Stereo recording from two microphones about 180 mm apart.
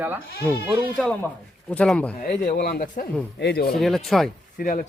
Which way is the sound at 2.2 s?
55° left (ahead or behind).